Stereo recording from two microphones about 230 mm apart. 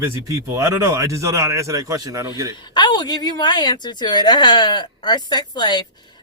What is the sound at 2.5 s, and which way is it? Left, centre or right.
A woman's voice, centre.